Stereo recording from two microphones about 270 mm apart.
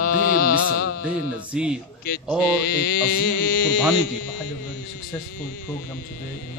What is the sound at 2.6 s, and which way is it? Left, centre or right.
Speech, left.